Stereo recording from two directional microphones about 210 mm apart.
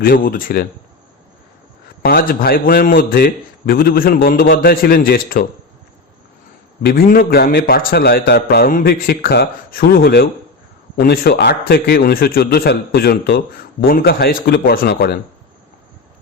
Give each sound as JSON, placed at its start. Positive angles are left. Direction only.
{"t": 0.0, "sound": "a man's voice", "side_deg": 45}
{"t": 2.0, "sound": "a man's voice", "side_deg": 45}
{"t": 6.8, "sound": "a man's voice", "side_deg": 45}